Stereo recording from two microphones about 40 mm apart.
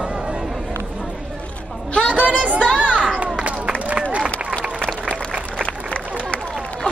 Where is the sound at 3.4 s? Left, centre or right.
Right.